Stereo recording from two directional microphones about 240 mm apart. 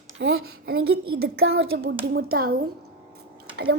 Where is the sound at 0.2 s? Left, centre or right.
Right.